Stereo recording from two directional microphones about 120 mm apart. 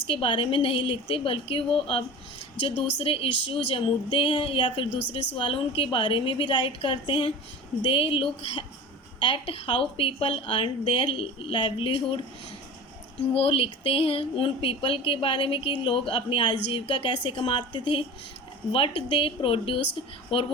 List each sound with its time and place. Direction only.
0.1 s speech: 45° left (ahead or behind)
13.3 s speech: 50° left (ahead or behind)